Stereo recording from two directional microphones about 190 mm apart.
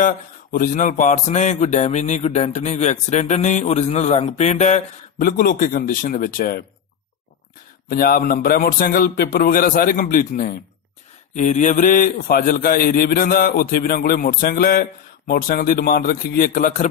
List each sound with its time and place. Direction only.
0.0 s music: 45° left (ahead or behind)
7.9 s a man's voice: 50° left (ahead or behind)